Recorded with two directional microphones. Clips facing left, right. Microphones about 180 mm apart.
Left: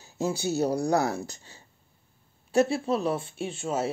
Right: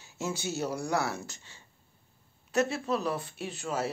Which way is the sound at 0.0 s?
35° left (ahead or behind).